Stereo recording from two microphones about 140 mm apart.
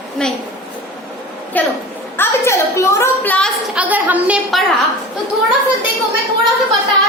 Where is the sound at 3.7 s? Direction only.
10° right (ahead or behind).